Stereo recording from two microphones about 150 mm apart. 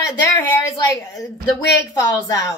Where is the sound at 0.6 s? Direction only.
20° left (ahead or behind).